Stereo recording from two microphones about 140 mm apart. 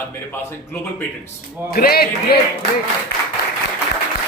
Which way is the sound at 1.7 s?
90° left.